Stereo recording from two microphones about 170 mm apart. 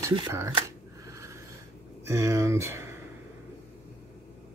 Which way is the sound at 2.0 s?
15° right (ahead or behind).